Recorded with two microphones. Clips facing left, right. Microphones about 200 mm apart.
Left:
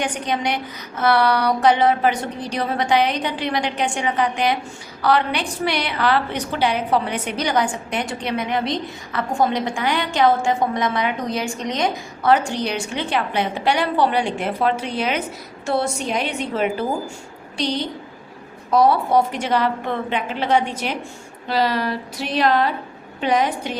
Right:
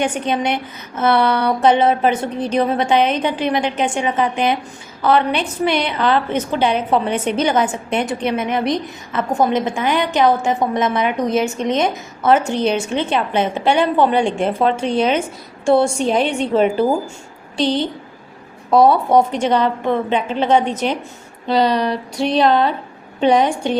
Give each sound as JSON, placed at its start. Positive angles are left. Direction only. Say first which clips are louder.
{"t": 0.0, "sound": "a woman's voice", "louder": "right 4 dB", "side_deg": -25}
{"t": 18.8, "sound": "a woman's voice", "louder": "right 4 dB", "side_deg": -25}